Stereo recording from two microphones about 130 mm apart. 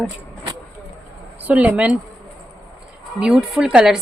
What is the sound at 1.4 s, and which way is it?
Speech, 10° right (ahead or behind).